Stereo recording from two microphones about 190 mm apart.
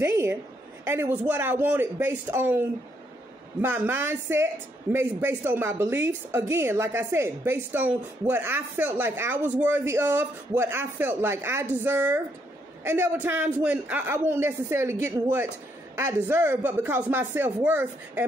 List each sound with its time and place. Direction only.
0.0 s a woman's voice: 15° right (ahead or behind)
3.6 s a woman's voice: 10° right (ahead or behind)